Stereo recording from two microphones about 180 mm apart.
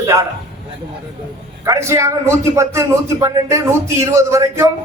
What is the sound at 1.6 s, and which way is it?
A man's voice, 15° right (ahead or behind).